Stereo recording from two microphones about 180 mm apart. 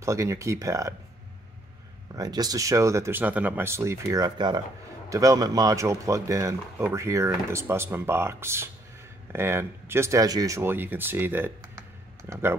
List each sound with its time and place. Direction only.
0.0 s speech: 15° right (ahead or behind)
2.1 s speech: 20° right (ahead or behind)